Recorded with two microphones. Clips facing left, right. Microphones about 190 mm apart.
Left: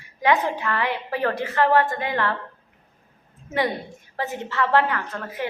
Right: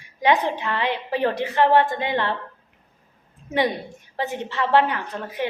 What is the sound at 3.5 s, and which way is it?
A woman's voice, 15° right (ahead or behind).